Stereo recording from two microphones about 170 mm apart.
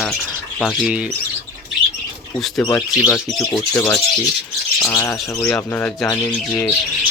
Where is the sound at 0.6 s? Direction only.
5° right (ahead or behind).